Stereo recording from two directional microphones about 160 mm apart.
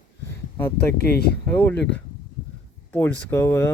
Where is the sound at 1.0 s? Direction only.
75° left (ahead or behind).